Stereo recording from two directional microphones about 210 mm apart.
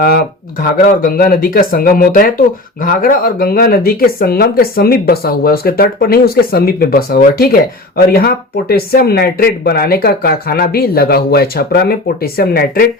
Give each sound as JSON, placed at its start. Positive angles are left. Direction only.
{"t": 0.0, "sound": "speech", "side_deg": 45}